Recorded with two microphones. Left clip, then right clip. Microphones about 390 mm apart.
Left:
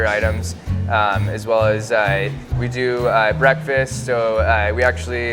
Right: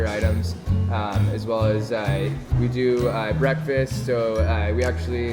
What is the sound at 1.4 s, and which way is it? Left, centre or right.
Speech, left.